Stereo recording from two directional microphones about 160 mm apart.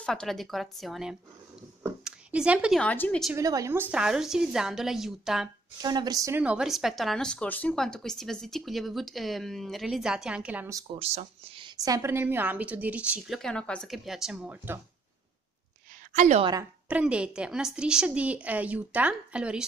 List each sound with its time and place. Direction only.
0.0 s a woman's voice: 5° left (ahead or behind)
2.0 s a sound: 5° right (ahead or behind)
2.8 s a woman's voice: 10° left (ahead or behind)
3.3 s a woman's voice: 20° right (ahead or behind); by 5.5 s centre (ahead or behind)
5.8 s speech: 25° right (ahead or behind)
6.4 s a woman's voice: 5° right (ahead or behind)
11.0 s a woman's voice: 40° right (ahead or behind); by 13.4 s 5° right (ahead or behind)
13.4 s a woman's voice: 5° left (ahead or behind); by 14.8 s 10° right (ahead or behind)
16.1 s a woman's voice: 45° right (ahead or behind)
16.8 s a woman's voice: 10° right (ahead or behind)